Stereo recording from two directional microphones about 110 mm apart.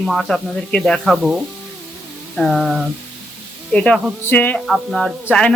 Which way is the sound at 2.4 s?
Centre (ahead or behind).